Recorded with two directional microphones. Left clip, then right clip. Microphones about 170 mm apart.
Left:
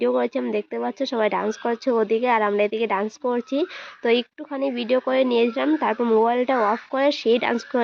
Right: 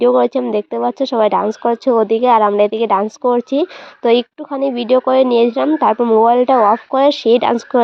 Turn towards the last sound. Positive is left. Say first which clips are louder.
# right 8 dB
turn(degrees=-30)  # may be behind; listen again after turning